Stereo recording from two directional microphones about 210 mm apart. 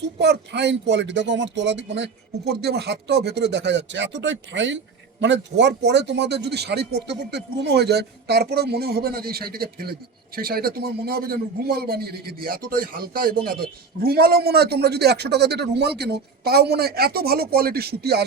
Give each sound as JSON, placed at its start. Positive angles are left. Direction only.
{"t": 0.2, "sound": "a man's voice", "side_deg": -55}